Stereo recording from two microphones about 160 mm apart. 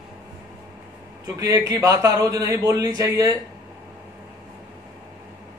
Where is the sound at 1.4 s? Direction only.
25° right (ahead or behind).